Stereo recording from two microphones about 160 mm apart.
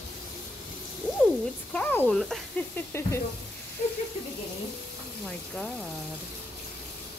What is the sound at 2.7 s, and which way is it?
Speech, 15° left (ahead or behind).